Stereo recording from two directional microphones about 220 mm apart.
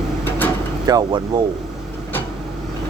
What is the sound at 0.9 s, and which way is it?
Speech, 20° right (ahead or behind).